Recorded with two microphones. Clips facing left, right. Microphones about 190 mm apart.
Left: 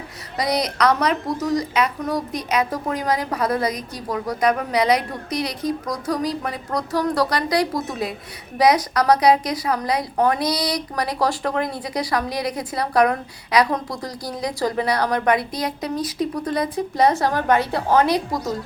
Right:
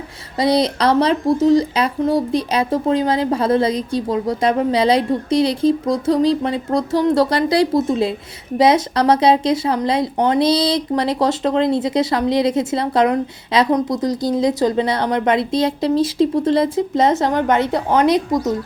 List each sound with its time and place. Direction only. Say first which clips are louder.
0.3 s speech: right 6 dB; 30° right (ahead or behind)